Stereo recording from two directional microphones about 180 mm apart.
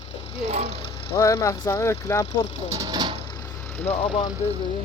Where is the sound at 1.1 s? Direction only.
15° left (ahead or behind).